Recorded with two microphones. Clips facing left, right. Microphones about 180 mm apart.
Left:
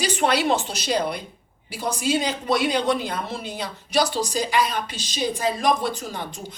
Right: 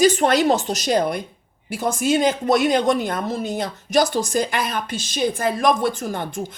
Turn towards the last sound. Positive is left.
turn(degrees=-50)  # may be behind; listen again after turning